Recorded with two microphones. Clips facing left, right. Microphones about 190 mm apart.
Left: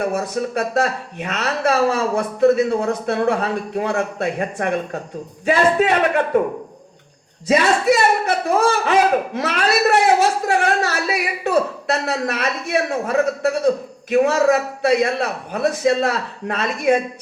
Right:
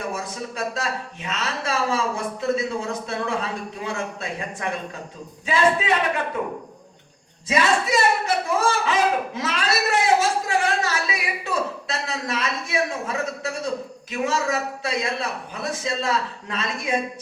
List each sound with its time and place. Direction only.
0.0 s speech: 60° left (ahead or behind)
7.6 s speech: 60° left (ahead or behind)